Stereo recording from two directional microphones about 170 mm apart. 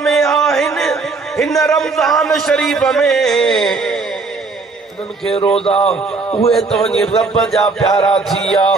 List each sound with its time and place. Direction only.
0.0 s a sound: 5° left (ahead or behind)
0.7 s a man's voice: 5° left (ahead or behind)
5.5 s a man's voice: 35° left (ahead or behind)
6.5 s a man's voice: 5° left (ahead or behind)
7.9 s chant: 25° left (ahead or behind)
8.3 s a man's voice: centre (ahead or behind)